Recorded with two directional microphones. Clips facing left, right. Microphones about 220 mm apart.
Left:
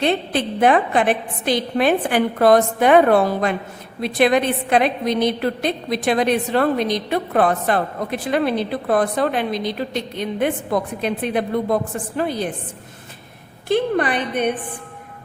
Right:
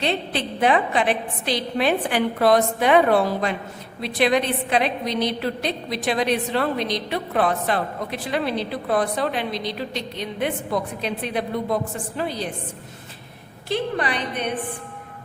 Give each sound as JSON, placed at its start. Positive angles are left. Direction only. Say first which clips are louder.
{"t": 0.0, "sound": "a woman's voice", "louder": "left 5 dB", "side_deg": 50}
{"t": 13.7, "sound": "a woman's voice", "louder": "left 6 dB", "side_deg": 50}